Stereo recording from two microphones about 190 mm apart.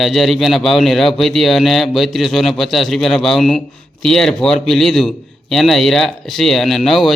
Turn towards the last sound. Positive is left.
turn(degrees=0)  # may be behind; listen again after turning